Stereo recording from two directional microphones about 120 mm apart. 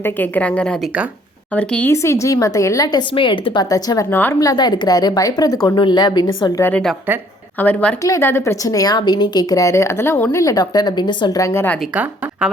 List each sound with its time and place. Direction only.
0.0 s a woman's voice: 15° left (ahead or behind)
1.9 s a woman's voice: 25° left (ahead or behind)
3.1 s a woman's voice: 45° left (ahead or behind)
4.1 s a woman's voice: 20° left (ahead or behind)
4.4 s a woman's voice: 35° left (ahead or behind)
6.6 s a woman's voice: 15° left (ahead or behind)
7.1 s speech: 15° right (ahead or behind)
7.6 s a woman's voice: 10° left (ahead or behind)
8.0 s a woman's voice: 25° left (ahead or behind)
10.4 s a woman's voice: 30° left (ahead or behind)
11.3 s a woman's voice: 25° left (ahead or behind)
11.9 s a woman's voice: 10° right (ahead or behind)